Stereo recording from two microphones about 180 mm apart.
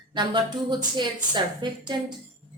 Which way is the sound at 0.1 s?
25° right (ahead or behind).